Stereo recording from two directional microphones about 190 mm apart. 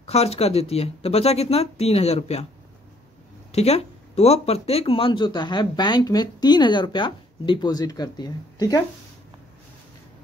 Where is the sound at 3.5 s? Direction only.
35° left (ahead or behind).